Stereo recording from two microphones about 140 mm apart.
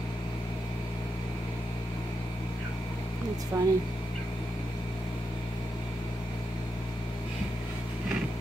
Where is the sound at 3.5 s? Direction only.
20° right (ahead or behind).